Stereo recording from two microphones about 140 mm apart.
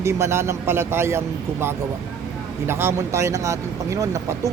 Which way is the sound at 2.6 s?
15° right (ahead or behind).